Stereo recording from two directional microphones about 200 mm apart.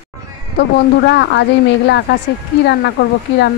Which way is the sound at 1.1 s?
60° left (ahead or behind).